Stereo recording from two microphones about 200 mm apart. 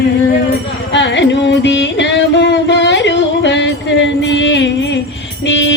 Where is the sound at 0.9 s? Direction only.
60° left (ahead or behind).